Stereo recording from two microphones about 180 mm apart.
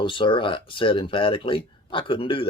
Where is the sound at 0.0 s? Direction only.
25° left (ahead or behind).